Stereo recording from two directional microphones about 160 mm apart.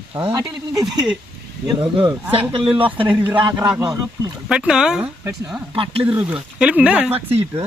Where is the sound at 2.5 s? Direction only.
35° right (ahead or behind).